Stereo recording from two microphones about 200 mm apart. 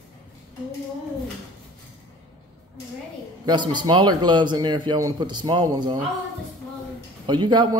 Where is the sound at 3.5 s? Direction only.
20° right (ahead or behind).